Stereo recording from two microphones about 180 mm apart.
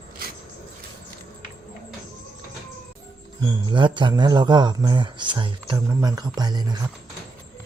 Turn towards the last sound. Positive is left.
turn(degrees=-20)  # may be behind; listen again after turning